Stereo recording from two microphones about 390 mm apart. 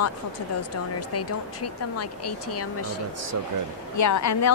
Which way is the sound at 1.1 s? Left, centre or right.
Left.